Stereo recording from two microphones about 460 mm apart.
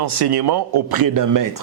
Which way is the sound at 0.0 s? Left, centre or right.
Right.